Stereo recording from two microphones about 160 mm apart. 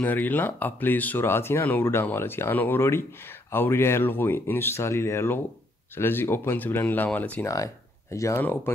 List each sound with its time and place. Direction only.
0.0 s speech: 10° left (ahead or behind)
7.4 s speech: 20° left (ahead or behind)